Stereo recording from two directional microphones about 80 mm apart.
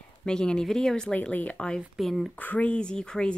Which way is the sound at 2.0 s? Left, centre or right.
Centre.